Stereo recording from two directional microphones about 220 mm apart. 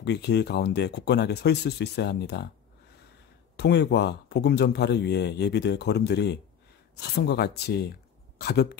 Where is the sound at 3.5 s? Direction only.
50° left (ahead or behind).